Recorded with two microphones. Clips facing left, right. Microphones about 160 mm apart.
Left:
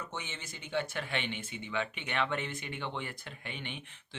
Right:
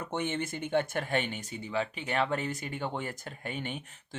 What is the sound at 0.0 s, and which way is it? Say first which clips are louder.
Speech: right 10 dB; 55° right (ahead or behind).